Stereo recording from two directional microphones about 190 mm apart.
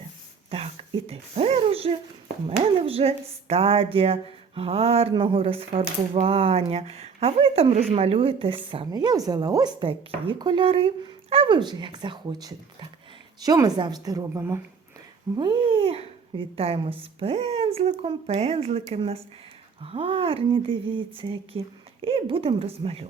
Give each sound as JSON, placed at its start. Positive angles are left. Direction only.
{"t": 0.5, "sound": "speech", "side_deg": -30}